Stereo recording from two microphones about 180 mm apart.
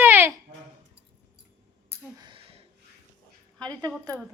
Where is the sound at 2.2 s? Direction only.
30° right (ahead or behind).